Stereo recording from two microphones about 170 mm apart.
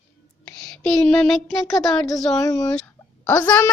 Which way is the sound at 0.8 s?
Centre (ahead or behind).